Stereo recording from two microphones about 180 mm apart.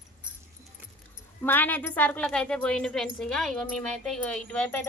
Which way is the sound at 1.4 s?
10° left (ahead or behind).